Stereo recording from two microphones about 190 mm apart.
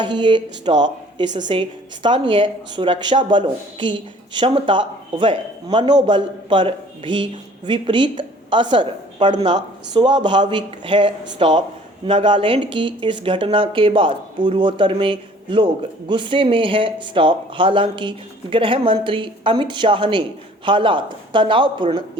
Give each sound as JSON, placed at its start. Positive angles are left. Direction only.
{"t": 0.0, "sound": "speech", "side_deg": -25}